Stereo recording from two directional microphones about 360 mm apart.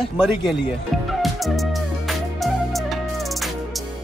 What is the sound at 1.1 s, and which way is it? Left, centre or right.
Music, centre.